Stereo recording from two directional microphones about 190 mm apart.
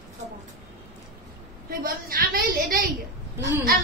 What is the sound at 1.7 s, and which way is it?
A woman's voice, 50° right (ahead or behind).